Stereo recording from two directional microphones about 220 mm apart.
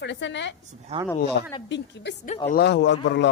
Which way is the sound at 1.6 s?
55° left (ahead or behind).